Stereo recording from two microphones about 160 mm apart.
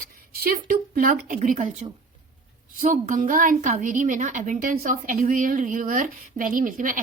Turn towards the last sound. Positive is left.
turn(degrees=-60)  # may be behind; listen again after turning